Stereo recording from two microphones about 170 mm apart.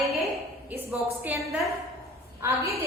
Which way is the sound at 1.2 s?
10° right (ahead or behind).